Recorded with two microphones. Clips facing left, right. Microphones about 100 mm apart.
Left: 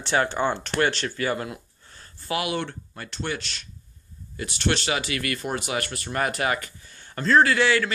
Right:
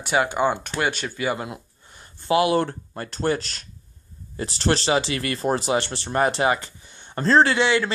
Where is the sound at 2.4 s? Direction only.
35° right (ahead or behind).